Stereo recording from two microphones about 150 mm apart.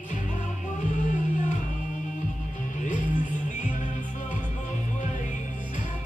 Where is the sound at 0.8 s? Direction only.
60° left (ahead or behind).